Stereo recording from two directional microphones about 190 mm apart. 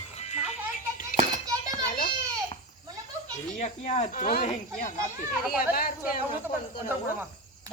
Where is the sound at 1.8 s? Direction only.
45° left (ahead or behind).